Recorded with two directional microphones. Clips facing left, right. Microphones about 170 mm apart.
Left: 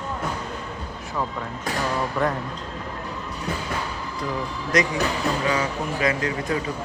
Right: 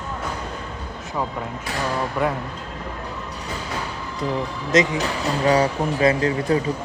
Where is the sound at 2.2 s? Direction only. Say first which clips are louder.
Right 1 dB; 5° right (ahead or behind).